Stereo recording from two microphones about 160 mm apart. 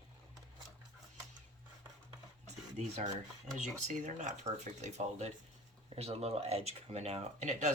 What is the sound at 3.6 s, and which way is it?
Speech, 50° right (ahead or behind).